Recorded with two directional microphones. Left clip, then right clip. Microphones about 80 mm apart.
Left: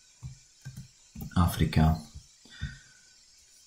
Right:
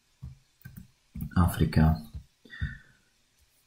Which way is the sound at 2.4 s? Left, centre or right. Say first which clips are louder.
Right 3 dB; centre.